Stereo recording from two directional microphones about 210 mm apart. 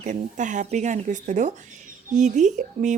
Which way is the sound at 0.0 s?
35° right (ahead or behind).